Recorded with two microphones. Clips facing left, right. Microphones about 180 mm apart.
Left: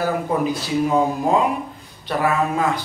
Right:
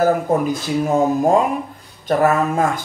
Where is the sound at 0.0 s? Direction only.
45° right (ahead or behind).